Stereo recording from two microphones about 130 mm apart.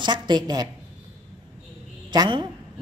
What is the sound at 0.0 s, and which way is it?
Speech, 35° right (ahead or behind).